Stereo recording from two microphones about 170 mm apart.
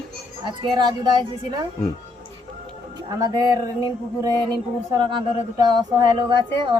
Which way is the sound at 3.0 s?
20° right (ahead or behind).